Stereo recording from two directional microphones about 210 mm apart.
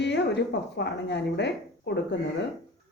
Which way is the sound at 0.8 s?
55° left (ahead or behind).